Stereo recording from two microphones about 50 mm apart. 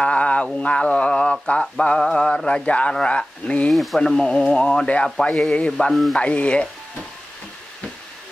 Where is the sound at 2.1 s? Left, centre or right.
Centre.